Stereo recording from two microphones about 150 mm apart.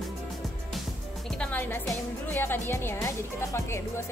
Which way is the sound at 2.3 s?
15° left (ahead or behind).